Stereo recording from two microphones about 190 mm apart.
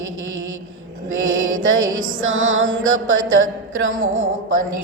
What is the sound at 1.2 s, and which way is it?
Mantra, 90° right.